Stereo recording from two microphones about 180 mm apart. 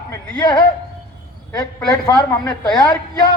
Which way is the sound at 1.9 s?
20° left (ahead or behind).